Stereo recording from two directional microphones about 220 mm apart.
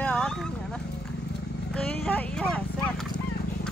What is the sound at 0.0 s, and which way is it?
Vehicle, 5° left (ahead or behind).